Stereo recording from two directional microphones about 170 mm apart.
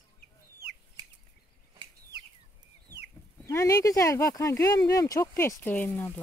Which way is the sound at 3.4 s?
15° left (ahead or behind).